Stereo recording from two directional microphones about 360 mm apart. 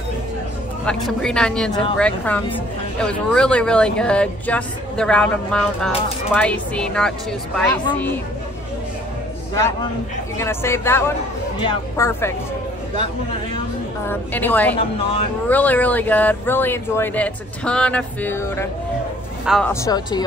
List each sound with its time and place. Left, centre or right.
0.8 s speech: centre
10.4 s speech: centre
14.0 s speech: centre
14.8 s speech: centre
15.4 s speech: centre